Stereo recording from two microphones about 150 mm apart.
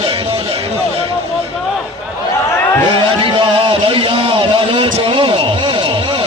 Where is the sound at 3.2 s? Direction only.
35° right (ahead or behind).